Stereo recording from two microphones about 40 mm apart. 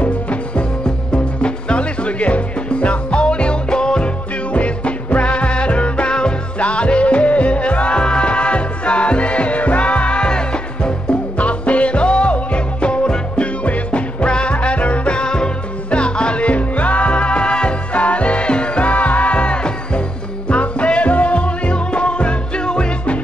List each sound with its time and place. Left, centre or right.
0.0 s music: left
4.6 s music: left
11.3 s music: left